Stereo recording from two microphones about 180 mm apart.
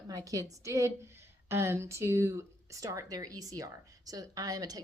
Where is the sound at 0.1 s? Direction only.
20° right (ahead or behind).